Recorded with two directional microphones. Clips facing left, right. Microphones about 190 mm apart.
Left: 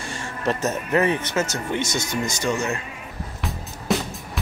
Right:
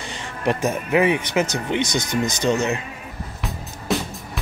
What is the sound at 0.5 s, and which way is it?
Speech, 10° right (ahead or behind).